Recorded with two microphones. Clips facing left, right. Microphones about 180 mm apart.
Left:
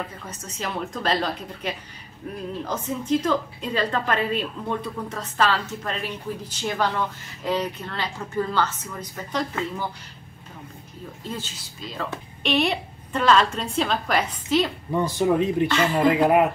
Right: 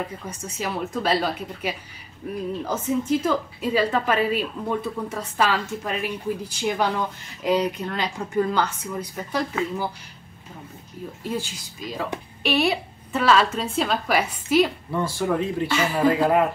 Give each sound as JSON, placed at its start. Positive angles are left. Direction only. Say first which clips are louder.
{"t": 0.3, "sound": "a woman's voice", "louder": "right 2 dB", "side_deg": -10}
{"t": 11.2, "sound": "a woman's voice", "louder": "right 5 dB", "side_deg": -10}
{"t": 14.9, "sound": "speech", "louder": "left 3 dB", "side_deg": 20}
{"t": 15.7, "sound": "a woman's voice", "louder": "left 1 dB", "side_deg": -10}
{"t": 16.1, "sound": "a sound", "louder": "left 1 dB", "side_deg": 20}